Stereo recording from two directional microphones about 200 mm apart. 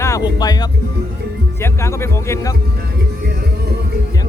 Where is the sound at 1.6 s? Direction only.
15° left (ahead or behind).